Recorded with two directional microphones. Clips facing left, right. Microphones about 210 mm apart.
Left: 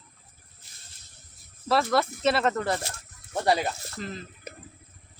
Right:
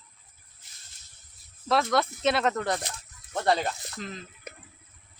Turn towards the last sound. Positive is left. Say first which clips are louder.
# left 2 dB
turn(degrees=0)  # may be behind; listen again after turning